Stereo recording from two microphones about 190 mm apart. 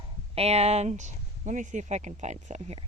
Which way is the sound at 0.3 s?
35° right (ahead or behind).